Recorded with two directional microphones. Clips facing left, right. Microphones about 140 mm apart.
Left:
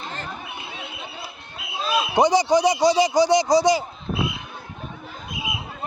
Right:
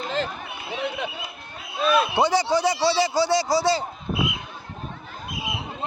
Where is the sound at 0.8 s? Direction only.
90° right.